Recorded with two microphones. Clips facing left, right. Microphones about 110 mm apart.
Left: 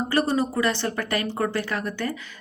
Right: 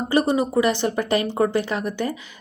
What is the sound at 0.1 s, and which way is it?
Speech, 15° right (ahead or behind).